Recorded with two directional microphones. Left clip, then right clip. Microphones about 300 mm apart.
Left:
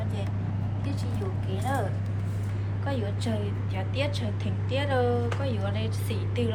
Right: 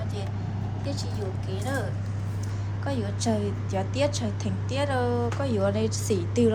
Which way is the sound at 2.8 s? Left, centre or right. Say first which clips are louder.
Right 3 dB; centre.